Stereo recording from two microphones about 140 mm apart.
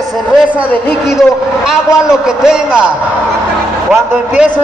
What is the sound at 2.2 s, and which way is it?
Speech, 5° right (ahead or behind).